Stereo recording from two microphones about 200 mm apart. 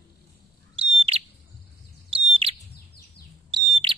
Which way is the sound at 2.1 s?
30° right (ahead or behind).